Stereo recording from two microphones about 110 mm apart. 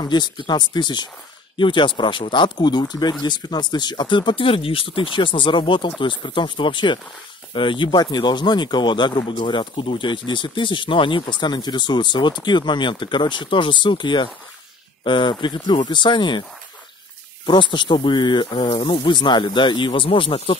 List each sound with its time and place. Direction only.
0.0 s speech: 40° left (ahead or behind)
17.5 s speech: 45° left (ahead or behind)